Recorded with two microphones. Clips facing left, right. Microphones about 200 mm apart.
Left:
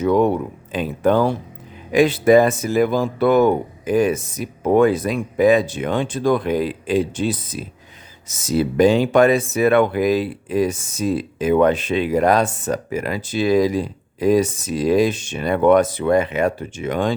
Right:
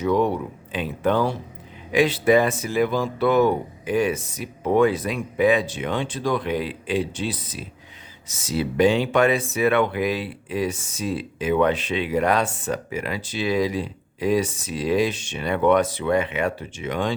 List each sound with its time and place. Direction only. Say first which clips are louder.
0.0 s speech: left 4 dB; 50° left (ahead or behind)